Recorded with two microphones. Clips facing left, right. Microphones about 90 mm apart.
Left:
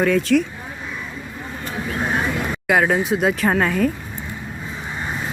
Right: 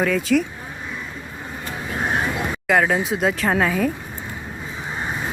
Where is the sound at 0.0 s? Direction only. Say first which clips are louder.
Left 2 dB; centre (ahead or behind).